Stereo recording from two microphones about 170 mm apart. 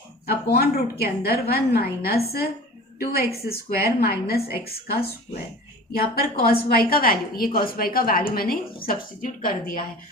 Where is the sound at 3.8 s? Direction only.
65° left (ahead or behind).